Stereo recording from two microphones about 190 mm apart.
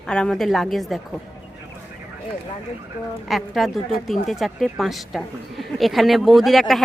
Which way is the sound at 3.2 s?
Centre (ahead or behind).